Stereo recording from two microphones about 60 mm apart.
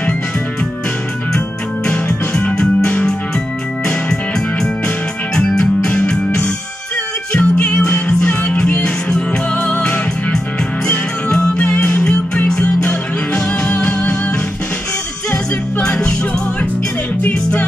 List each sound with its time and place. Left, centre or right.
2.3 s music: centre
15.3 s music: centre
17.3 s music: left